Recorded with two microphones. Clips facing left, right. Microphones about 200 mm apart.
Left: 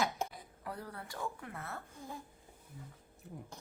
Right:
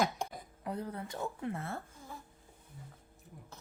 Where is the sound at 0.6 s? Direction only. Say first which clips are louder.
Right 6 dB; 20° right (ahead or behind).